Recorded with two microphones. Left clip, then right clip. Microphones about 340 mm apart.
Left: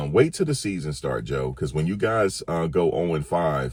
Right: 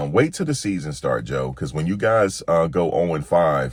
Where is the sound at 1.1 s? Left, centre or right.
Centre.